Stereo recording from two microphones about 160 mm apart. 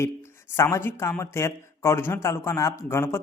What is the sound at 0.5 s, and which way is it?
Speech, 15° left (ahead or behind).